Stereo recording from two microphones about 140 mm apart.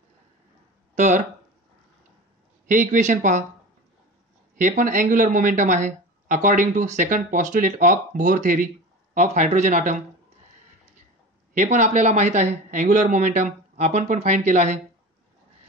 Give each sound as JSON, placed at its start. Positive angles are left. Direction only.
{"t": 0.9, "sound": "a sound", "side_deg": -60}
{"t": 2.7, "sound": "speech", "side_deg": -65}
{"t": 4.6, "sound": "speech", "side_deg": -65}
{"t": 11.5, "sound": "speech", "side_deg": -60}